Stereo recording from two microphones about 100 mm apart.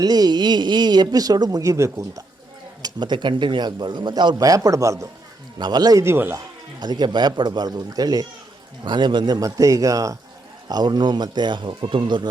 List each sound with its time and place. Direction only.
0.0 s speech: 40° right (ahead or behind)
2.8 s a man's voice: 50° right (ahead or behind); by 5.0 s 30° right (ahead or behind)
5.5 s a man's voice: 45° right (ahead or behind)
6.0 s speech: 25° right (ahead or behind)
6.7 s a man's voice: 45° right (ahead or behind)